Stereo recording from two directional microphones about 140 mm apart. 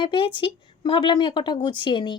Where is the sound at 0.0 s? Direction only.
40° left (ahead or behind).